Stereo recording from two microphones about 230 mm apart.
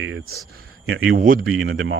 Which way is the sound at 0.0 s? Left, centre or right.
Right.